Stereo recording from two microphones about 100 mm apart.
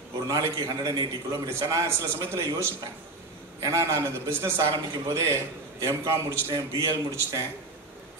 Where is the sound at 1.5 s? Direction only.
30° right (ahead or behind).